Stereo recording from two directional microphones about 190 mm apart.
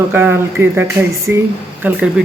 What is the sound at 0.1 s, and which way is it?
Speech, 10° right (ahead or behind).